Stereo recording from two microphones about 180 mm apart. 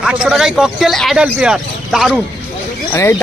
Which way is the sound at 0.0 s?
Centre (ahead or behind).